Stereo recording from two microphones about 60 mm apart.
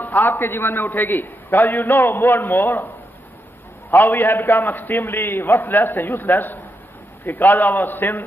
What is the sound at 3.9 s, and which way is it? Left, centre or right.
A man's voice, left.